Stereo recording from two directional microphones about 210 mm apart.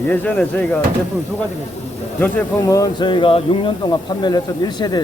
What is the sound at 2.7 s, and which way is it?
Speech, 20° left (ahead or behind).